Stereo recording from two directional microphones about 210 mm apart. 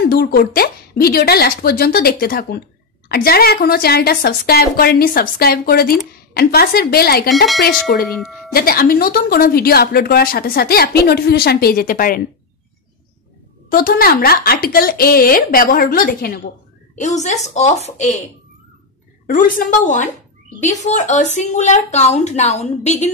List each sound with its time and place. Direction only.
0.0 s a woman's voice: 45° left (ahead or behind)
7.2 s speech: centre (ahead or behind)
7.8 s a woman's voice: 50° left (ahead or behind)
8.1 s speech: centre (ahead or behind)
8.5 s a woman's voice: 45° left (ahead or behind)
13.7 s a woman's voice: 45° left (ahead or behind)
16.9 s speech: 35° left (ahead or behind)
19.2 s speech: 40° left (ahead or behind)